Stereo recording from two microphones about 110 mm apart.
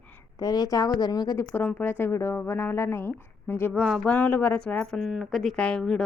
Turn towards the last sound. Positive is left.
turn(degrees=5)  # may be behind; listen again after turning